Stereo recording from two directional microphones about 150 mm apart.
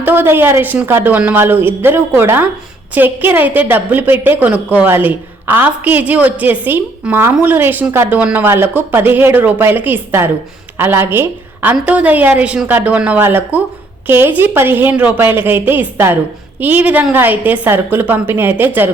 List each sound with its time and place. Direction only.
0.0 s a woman's voice: 15° right (ahead or behind)